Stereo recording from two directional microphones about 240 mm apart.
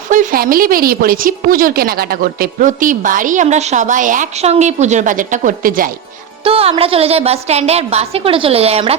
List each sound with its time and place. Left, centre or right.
0.1 s a woman's voice: right
6.4 s a woman's voice: right